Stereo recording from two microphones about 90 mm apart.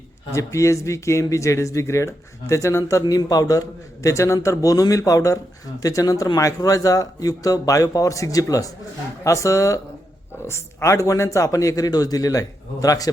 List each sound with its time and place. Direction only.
0.3 s speech: 35° left (ahead or behind)
3.0 s speech: 45° left (ahead or behind)